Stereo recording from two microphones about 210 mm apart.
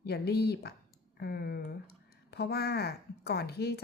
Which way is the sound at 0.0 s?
50° left (ahead or behind).